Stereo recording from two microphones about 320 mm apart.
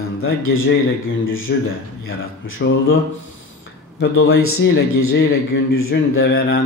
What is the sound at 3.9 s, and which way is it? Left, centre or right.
A man's voice, left.